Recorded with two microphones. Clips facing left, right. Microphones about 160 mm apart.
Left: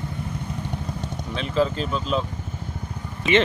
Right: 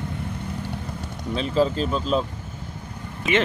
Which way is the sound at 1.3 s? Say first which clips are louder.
Right 2 dB; 35° right (ahead or behind).